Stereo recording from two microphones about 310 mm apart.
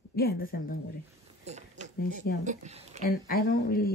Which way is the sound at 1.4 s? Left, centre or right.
Right.